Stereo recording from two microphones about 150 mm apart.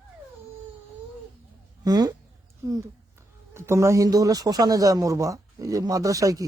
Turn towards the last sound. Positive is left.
turn(degrees=-20)  # may be behind; listen again after turning